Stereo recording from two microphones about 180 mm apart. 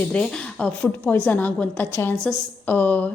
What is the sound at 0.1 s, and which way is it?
A woman's voice, 5° left (ahead or behind).